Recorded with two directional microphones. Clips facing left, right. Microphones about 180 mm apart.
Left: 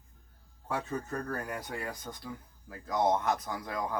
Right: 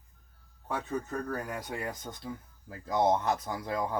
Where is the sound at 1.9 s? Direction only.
25° right (ahead or behind).